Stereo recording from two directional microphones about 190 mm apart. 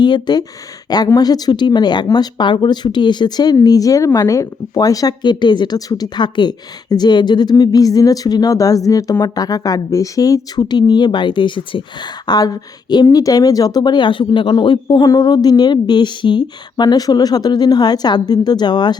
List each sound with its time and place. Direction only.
0.0 s speech: 20° left (ahead or behind)